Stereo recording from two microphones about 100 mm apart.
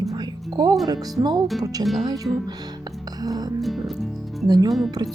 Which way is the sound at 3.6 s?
Centre (ahead or behind).